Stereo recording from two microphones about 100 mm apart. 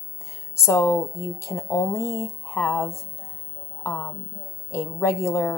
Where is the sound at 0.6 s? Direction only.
25° left (ahead or behind).